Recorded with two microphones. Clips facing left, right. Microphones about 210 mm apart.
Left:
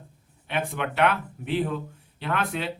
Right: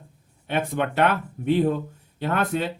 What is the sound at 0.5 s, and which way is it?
Speech, 40° right (ahead or behind).